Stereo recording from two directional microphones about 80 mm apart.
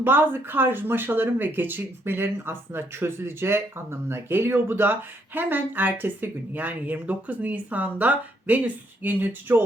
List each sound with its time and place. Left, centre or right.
0.0 s speech: right